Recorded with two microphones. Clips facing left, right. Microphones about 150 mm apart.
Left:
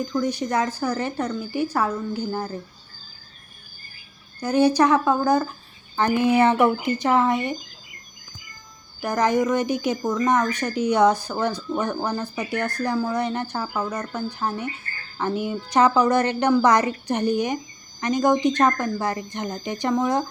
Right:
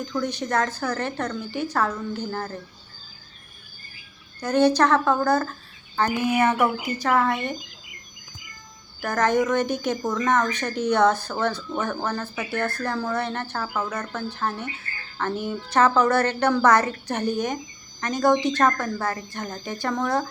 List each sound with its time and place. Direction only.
0.0 s speech: 10° left (ahead or behind)
4.4 s speech: 10° left (ahead or behind)
6.1 s speech: 30° left (ahead or behind)
9.0 s speech: 15° left (ahead or behind)